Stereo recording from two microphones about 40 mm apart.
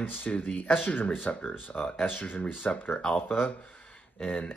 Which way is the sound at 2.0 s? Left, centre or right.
Left.